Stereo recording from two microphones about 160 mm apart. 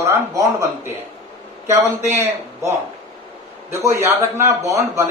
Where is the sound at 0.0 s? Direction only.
20° right (ahead or behind).